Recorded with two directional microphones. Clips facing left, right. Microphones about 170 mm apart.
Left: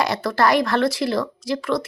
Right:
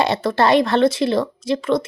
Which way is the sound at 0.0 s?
25° right (ahead or behind).